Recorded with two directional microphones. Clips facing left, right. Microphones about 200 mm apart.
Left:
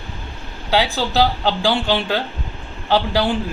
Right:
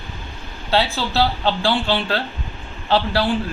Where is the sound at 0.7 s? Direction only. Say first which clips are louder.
Left 1 dB; 15° left (ahead or behind).